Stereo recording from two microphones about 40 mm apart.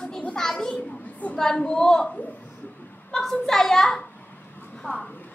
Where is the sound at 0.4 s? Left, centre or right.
Centre.